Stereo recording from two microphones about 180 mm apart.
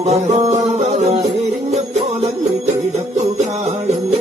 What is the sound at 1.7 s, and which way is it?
Jingle bell, 40° right (ahead or behind).